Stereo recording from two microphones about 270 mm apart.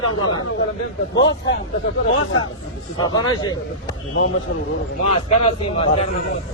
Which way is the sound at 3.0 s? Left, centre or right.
Centre.